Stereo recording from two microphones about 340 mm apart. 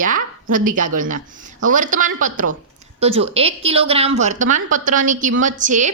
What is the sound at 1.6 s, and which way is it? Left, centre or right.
A woman's voice, right.